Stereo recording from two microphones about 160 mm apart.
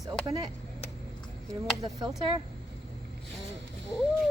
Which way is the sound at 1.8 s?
30° right (ahead or behind).